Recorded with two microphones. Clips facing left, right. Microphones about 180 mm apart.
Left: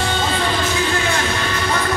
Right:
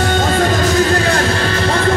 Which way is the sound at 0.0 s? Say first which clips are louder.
Right 6 dB; 50° right (ahead or behind).